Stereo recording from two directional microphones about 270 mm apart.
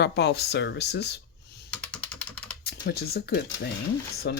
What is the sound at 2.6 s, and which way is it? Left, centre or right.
Speech, left.